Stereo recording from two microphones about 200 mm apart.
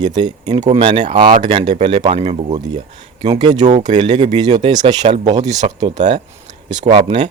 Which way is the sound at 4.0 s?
25° right (ahead or behind).